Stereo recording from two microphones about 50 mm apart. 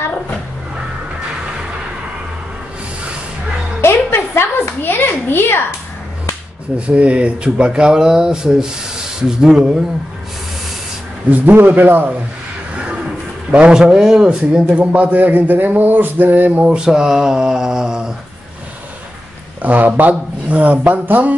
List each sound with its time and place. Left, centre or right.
3.8 s a sound: left
6.9 s speech: right
11.2 s a man's voice: right
12.7 s a sound: right
13.5 s a man's voice: centre; by 16.6 s right
16.6 s speech: centre
19.6 s a man's voice: right